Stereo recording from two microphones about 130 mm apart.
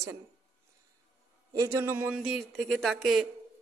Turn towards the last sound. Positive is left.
turn(degrees=0)  # may be behind; listen again after turning